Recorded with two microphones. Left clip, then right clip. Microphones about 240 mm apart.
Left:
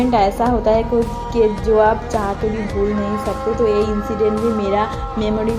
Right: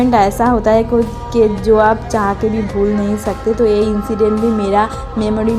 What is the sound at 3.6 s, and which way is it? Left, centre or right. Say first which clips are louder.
A woman's voice: right 3 dB; right.